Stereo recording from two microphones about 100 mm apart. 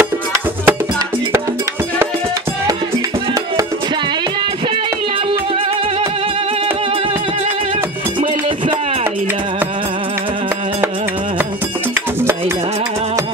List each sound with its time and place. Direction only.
0.0 s music: 20° right (ahead or behind)